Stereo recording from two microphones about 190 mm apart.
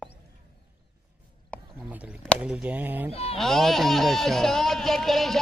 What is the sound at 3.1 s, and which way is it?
Speech, 30° left (ahead or behind).